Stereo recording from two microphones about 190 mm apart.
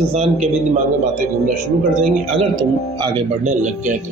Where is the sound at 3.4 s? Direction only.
40° right (ahead or behind).